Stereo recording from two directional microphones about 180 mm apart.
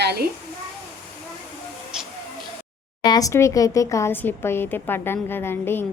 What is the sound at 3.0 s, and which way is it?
Speech, 20° left (ahead or behind).